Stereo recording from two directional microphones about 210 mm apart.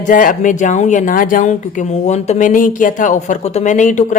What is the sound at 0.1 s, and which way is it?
A woman's voice, 40° left (ahead or behind).